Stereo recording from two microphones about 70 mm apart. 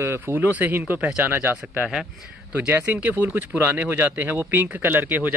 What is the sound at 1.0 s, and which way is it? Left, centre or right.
Speech, centre.